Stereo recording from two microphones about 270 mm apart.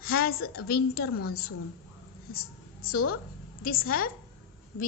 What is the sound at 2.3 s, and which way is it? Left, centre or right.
A woman's voice, left.